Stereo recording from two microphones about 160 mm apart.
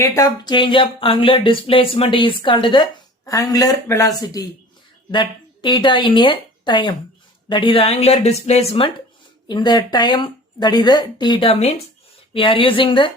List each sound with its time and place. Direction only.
0.0 s speech: 25° left (ahead or behind)
5.1 s a woman's voice: 30° left (ahead or behind)